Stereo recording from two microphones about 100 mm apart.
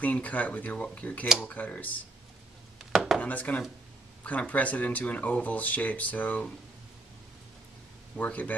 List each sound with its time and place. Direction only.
0.0 s speech: 15° left (ahead or behind)
2.8 s chopping: 5° right (ahead or behind)
3.2 s speech: 15° left (ahead or behind)
8.2 s speech: 15° left (ahead or behind)